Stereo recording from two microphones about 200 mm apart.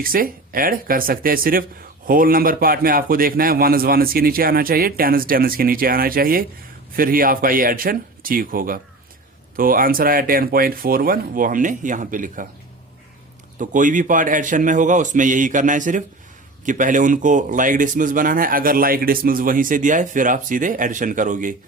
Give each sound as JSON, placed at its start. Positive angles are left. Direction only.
{"t": 0.0, "sound": "a man's voice", "side_deg": -45}
{"t": 13.6, "sound": "speech", "side_deg": -40}